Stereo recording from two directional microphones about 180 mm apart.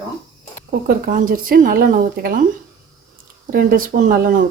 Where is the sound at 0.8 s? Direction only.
50° right (ahead or behind).